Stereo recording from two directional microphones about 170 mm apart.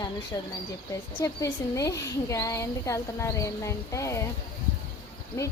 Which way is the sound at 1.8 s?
20° left (ahead or behind).